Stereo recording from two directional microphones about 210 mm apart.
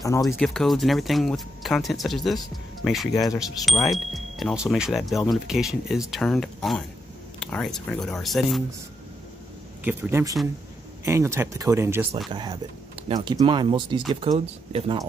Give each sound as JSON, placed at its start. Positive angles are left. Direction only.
{"t": 0.0, "sound": "speech", "side_deg": 15}
{"t": 0.4, "sound": "speech", "side_deg": 0}
{"t": 9.8, "sound": "speech", "side_deg": -10}